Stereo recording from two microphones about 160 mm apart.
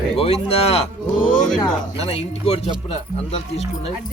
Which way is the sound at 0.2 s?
40° left (ahead or behind).